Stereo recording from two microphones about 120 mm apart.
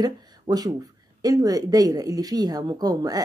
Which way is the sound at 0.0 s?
35° right (ahead or behind).